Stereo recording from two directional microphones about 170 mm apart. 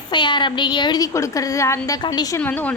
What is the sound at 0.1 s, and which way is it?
A woman's voice, 25° left (ahead or behind).